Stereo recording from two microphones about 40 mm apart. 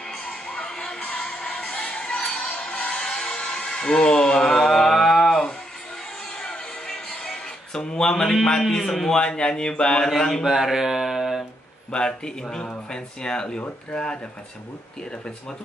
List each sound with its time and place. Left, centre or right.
0.2 s a sound: left
0.7 s music: centre
6.4 s music: centre
8.7 s a man's voice: centre
9.1 s speech: left
10.0 s a man's voice: centre
10.4 s speech: centre
11.9 s speech: left